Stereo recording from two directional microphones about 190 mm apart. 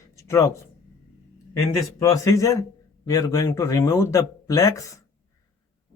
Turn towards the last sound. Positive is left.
turn(degrees=15)  # may be behind; listen again after turning